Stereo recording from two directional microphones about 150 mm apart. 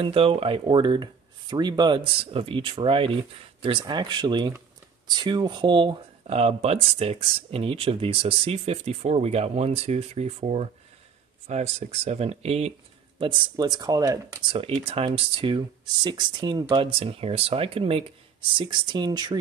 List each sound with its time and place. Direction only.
0.0 s speech: 40° right (ahead or behind)
6.2 s speech: 45° right (ahead or behind)
13.2 s speech: 25° right (ahead or behind)
14.8 s speech: 35° right (ahead or behind)